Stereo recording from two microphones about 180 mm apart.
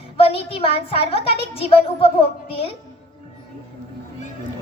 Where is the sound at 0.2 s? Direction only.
30° left (ahead or behind).